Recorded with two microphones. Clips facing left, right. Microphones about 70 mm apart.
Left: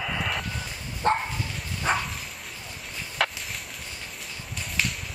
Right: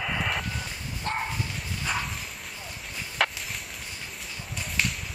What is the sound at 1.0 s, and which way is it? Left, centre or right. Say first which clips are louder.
Dog: left 8 dB; left.